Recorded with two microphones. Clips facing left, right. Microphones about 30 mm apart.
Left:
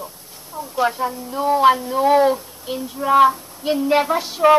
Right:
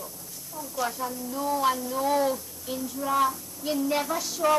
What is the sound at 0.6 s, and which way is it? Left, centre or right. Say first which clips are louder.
A woman's voice: left 10 dB; left.